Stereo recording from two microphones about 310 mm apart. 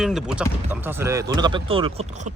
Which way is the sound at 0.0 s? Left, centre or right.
Centre.